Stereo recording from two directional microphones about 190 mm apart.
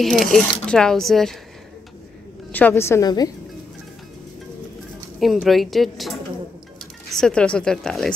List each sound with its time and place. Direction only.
0.0 s speech: centre (ahead or behind)
2.5 s a woman's voice: 10° left (ahead or behind)
5.2 s speech: centre (ahead or behind)